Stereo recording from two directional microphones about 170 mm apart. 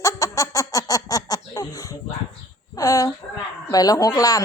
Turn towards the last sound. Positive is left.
turn(degrees=20)  # may be behind; listen again after turning